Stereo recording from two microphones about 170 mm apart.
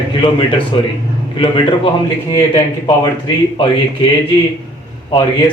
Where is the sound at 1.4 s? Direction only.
30° left (ahead or behind).